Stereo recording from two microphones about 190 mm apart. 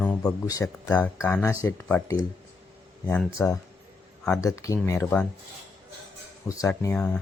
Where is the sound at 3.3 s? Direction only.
15° left (ahead or behind).